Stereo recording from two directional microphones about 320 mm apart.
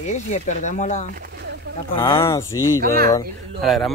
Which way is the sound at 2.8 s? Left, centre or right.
Right.